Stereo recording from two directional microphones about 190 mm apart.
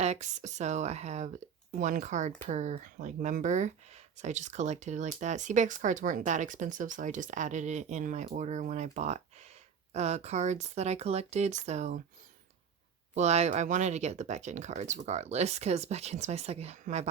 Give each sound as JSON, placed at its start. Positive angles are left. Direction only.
{"t": 0.0, "sound": "speech", "side_deg": -35}
{"t": 13.1, "sound": "speech", "side_deg": -35}